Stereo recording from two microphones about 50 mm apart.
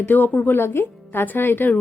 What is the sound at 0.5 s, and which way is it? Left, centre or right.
A woman's voice, left.